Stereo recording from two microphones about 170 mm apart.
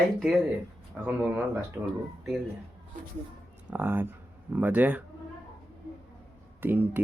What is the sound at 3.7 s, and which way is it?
Speech, 10° right (ahead or behind).